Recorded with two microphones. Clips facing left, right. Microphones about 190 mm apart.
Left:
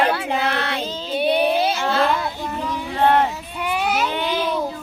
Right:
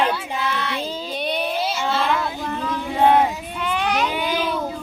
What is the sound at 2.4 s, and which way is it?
Child singing, 15° left (ahead or behind).